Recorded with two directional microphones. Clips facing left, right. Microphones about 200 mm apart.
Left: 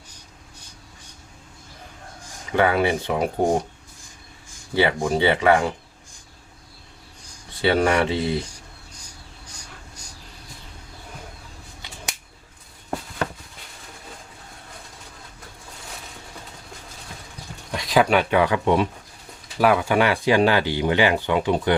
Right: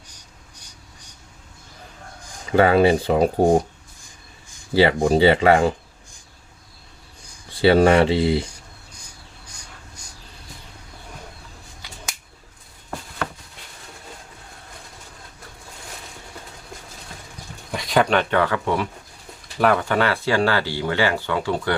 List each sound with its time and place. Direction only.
2.5 s speech: 30° right (ahead or behind)
4.8 s speech: 35° right (ahead or behind)
7.6 s speech: 30° right (ahead or behind)
17.7 s speech: centre (ahead or behind); by 18.9 s 20° left (ahead or behind)
19.5 s speech: 5° left (ahead or behind)